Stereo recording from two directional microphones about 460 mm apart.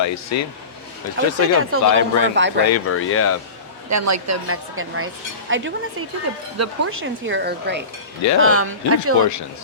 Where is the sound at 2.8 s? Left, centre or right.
Left.